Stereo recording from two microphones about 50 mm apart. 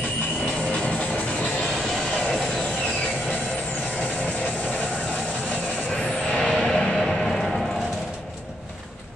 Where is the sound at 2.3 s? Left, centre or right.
Centre.